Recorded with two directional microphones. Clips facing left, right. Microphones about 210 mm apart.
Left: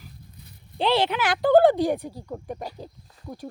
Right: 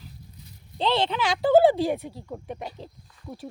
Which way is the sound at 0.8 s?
10° left (ahead or behind).